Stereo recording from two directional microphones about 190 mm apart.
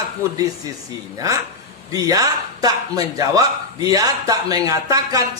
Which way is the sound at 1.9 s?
20° right (ahead or behind).